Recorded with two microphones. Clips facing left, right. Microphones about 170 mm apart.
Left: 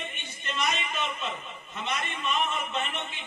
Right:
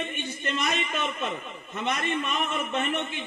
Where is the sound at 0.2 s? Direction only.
55° right (ahead or behind).